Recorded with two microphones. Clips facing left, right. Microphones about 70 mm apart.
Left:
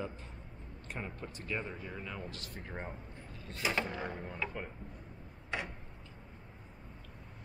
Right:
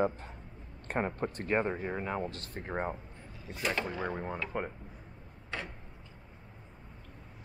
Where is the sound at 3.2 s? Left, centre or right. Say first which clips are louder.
Right 1 dB; centre.